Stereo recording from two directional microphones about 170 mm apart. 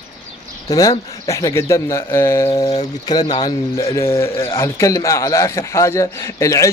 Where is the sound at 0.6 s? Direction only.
20° left (ahead or behind).